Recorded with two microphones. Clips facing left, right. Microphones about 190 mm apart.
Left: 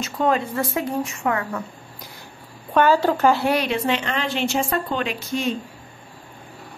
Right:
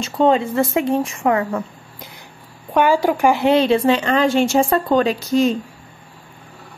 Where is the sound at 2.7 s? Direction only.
10° right (ahead or behind); by 5.3 s 40° right (ahead or behind).